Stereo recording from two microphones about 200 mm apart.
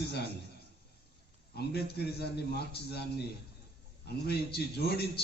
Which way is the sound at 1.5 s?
55° left (ahead or behind).